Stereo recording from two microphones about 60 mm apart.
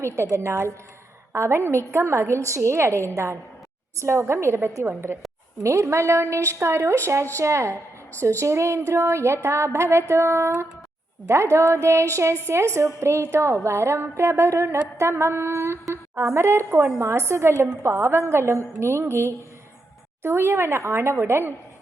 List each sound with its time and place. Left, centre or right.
0.0 s a woman's voice: right
4.0 s a woman's voice: right